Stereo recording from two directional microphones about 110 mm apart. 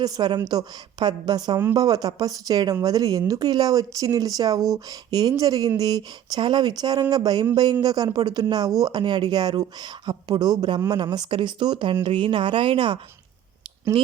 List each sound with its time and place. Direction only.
0.0 s speech: 40° right (ahead or behind)